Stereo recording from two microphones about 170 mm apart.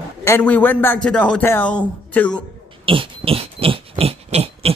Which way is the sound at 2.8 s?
30° right (ahead or behind).